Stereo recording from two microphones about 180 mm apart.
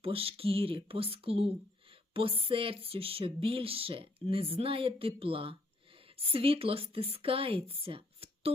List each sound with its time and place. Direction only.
0.0 s speech: 30° right (ahead or behind)